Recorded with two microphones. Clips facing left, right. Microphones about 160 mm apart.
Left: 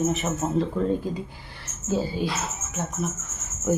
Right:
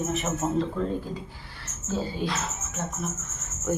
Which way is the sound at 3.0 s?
5° left (ahead or behind).